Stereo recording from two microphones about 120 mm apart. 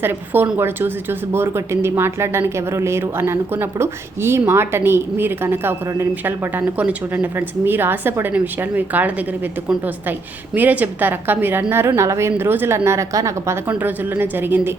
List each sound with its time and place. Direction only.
0.0 s a woman's voice: 15° right (ahead or behind)
13.7 s a woman's voice: 15° right (ahead or behind)